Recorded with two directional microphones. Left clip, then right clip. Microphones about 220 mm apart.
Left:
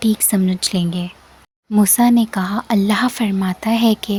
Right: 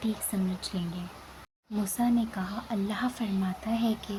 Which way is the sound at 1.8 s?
40° left (ahead or behind).